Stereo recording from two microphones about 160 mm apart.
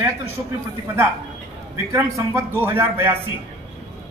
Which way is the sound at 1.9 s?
20° right (ahead or behind).